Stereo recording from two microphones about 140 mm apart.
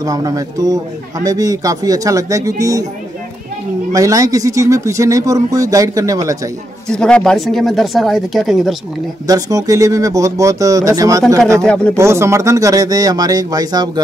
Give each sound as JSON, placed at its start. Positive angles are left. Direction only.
{"t": 0.0, "sound": "speech", "side_deg": -25}
{"t": 3.9, "sound": "speech", "side_deg": -25}
{"t": 6.9, "sound": "speech", "side_deg": 5}
{"t": 9.3, "sound": "speech", "side_deg": -25}
{"t": 11.6, "sound": "speech", "side_deg": 10}
{"t": 12.0, "sound": "speech", "side_deg": -20}